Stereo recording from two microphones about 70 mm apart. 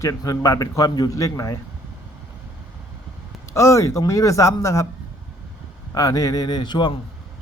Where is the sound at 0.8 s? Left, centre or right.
Left.